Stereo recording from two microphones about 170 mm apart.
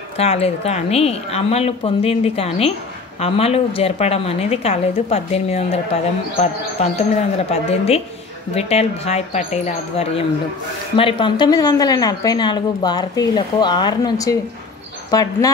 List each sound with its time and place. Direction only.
0.2 s a woman's voice: 35° left (ahead or behind); by 15.5 s 20° left (ahead or behind)